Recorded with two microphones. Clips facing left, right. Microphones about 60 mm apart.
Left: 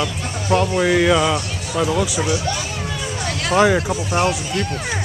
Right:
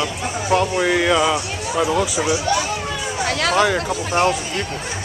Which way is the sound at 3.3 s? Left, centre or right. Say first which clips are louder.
Right 3 dB; right.